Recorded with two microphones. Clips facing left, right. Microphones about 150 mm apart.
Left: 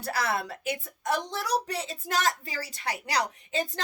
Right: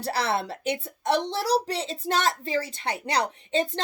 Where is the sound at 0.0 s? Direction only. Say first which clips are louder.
Right 3 dB; 30° right (ahead or behind).